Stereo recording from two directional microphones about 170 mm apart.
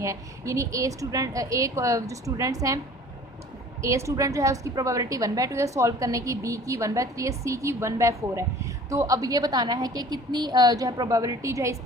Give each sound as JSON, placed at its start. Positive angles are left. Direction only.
{"t": 0.0, "sound": "a woman's voice", "side_deg": -20}